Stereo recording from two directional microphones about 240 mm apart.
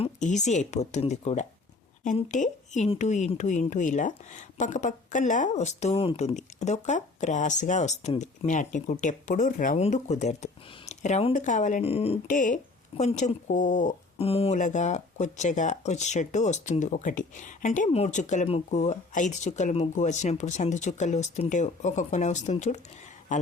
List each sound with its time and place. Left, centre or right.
0.0 s a woman's voice: left